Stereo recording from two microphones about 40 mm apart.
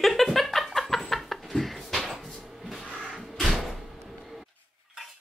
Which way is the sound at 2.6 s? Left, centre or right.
Centre.